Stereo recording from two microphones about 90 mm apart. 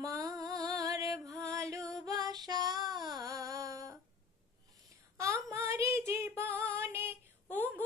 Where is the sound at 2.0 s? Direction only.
45° right (ahead or behind).